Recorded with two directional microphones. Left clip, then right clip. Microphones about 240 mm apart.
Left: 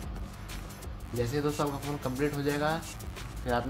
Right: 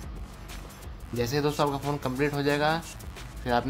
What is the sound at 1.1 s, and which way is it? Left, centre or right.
Speech, right.